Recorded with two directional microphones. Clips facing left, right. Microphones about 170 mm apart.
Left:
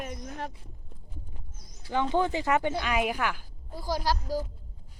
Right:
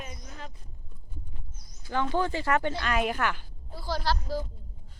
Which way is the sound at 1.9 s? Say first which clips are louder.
Left 2 dB; 20° left (ahead or behind).